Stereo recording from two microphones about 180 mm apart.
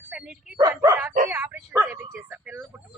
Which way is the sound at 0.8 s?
15° right (ahead or behind).